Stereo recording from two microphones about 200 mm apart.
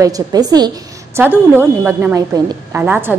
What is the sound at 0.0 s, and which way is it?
A woman's voice, 20° right (ahead or behind).